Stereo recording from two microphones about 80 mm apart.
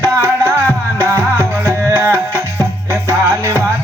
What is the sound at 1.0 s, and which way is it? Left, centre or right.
Music, right.